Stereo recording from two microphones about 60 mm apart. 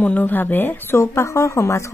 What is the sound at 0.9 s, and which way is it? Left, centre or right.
A woman's voice, left.